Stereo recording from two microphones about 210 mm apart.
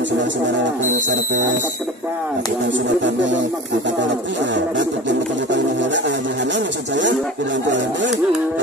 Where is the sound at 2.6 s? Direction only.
60° right (ahead or behind).